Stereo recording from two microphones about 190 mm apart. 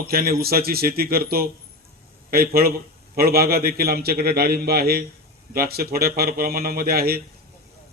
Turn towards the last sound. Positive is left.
turn(degrees=-55)  # may be behind; listen again after turning